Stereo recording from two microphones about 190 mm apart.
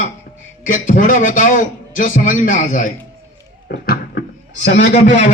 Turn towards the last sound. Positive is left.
turn(degrees=35)  # may be behind; listen again after turning